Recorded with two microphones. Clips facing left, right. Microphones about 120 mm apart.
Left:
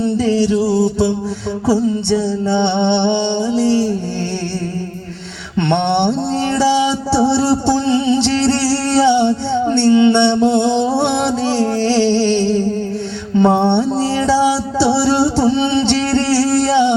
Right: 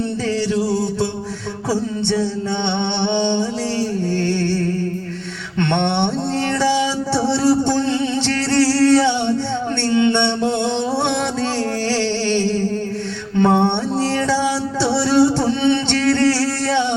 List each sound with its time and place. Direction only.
0.2 s music: 15° left (ahead or behind)
5.5 s music: 15° left (ahead or behind)
8.4 s singing: 20° left (ahead or behind)
13.3 s music: 20° left (ahead or behind)